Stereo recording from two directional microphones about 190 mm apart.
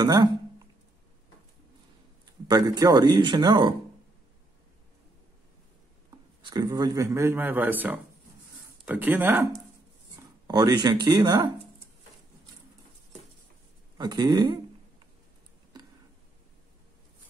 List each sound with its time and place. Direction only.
0.0 s speech: 20° right (ahead or behind)
2.4 s speech: 20° right (ahead or behind)
6.5 s speech: 20° right (ahead or behind)
13.9 s speech: 20° right (ahead or behind)